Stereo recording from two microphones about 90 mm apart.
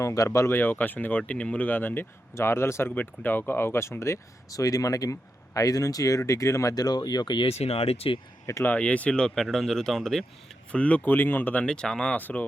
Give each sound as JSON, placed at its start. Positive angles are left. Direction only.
{"t": 0.0, "sound": "speech", "side_deg": 35}
{"t": 8.6, "sound": "speech", "side_deg": 15}
{"t": 11.6, "sound": "speech", "side_deg": 10}